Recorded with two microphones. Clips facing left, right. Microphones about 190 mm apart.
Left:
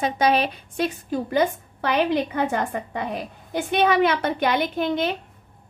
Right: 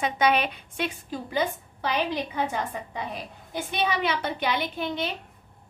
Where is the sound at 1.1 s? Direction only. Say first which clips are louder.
Left 7 dB; 55° left (ahead or behind).